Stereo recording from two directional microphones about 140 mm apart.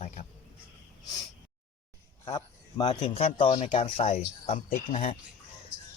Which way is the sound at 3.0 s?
45° left (ahead or behind).